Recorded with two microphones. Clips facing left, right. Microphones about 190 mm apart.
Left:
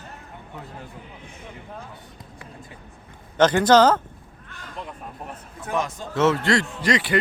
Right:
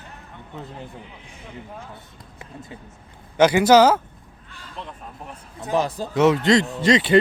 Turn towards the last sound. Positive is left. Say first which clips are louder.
# right 5 dB
turn(degrees=-25)  # may be behind; listen again after turning